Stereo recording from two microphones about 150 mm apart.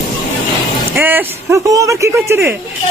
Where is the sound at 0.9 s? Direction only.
15° right (ahead or behind).